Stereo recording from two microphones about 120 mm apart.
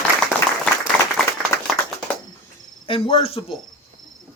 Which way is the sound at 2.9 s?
50° left (ahead or behind).